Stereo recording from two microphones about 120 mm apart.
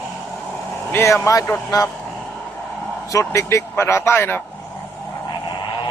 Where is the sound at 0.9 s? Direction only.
20° left (ahead or behind).